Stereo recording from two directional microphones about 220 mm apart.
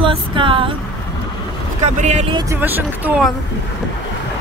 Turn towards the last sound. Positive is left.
turn(degrees=-5)  # may be behind; listen again after turning